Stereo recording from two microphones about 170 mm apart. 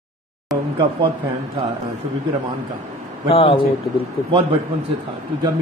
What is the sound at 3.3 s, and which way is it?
Speech, 35° left (ahead or behind).